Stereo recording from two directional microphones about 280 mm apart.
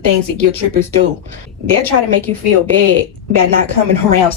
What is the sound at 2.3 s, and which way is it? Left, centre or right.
Speech, centre.